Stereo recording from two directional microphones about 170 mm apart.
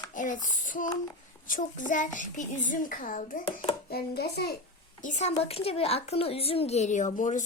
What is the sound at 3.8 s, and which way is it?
Speech, 65° left (ahead or behind).